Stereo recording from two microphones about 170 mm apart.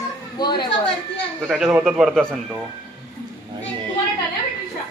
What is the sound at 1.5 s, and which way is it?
Speech, 5° right (ahead or behind).